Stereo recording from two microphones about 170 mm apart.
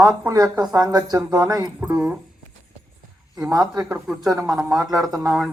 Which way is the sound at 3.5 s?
20° right (ahead or behind).